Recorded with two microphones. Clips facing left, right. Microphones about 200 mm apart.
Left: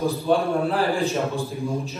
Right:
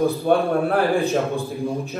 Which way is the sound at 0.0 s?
55° right (ahead or behind).